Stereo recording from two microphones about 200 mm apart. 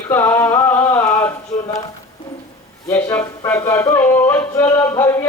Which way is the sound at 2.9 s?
10° left (ahead or behind).